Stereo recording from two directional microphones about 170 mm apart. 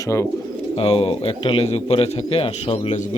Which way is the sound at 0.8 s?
35° left (ahead or behind).